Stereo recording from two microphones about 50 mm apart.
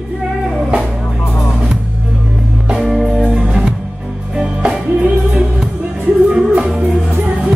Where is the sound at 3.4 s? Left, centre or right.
Centre.